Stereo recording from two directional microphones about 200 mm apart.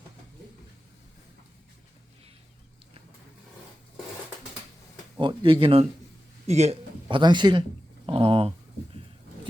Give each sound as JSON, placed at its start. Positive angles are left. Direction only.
{"t": 5.2, "sound": "speech", "side_deg": -25}